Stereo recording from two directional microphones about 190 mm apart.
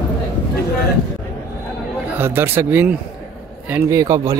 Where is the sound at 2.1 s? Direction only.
10° right (ahead or behind).